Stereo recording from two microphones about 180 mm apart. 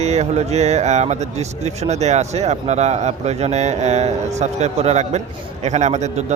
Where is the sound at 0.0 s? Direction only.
35° right (ahead or behind).